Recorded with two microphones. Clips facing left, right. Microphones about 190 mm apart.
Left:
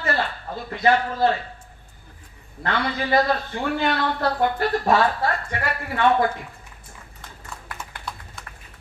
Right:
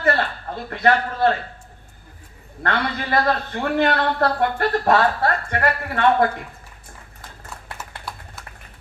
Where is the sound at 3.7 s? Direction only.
60° right (ahead or behind).